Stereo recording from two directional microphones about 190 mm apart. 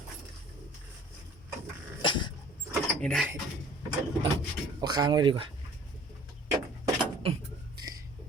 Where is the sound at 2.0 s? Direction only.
25° left (ahead or behind).